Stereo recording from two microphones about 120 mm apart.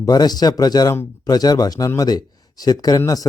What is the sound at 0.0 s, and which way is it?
A man's voice, 35° left (ahead or behind).